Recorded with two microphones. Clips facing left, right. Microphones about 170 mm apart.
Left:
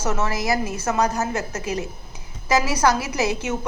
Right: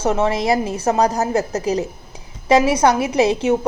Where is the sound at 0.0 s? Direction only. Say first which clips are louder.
Right 6 dB; 30° right (ahead or behind).